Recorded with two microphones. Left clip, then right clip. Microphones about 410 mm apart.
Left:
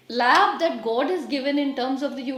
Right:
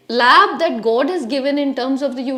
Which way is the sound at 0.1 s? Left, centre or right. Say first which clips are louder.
Right 7 dB; right.